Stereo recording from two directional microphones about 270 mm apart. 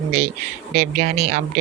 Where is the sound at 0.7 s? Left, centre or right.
Right.